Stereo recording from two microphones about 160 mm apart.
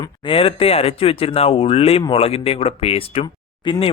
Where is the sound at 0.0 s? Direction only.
35° left (ahead or behind).